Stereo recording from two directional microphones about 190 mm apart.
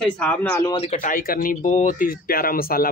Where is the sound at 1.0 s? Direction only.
50° left (ahead or behind).